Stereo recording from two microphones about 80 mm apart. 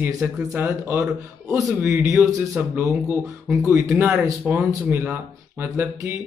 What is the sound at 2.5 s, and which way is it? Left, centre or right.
Speech, right.